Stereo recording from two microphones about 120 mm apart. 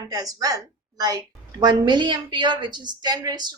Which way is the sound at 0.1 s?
30° right (ahead or behind).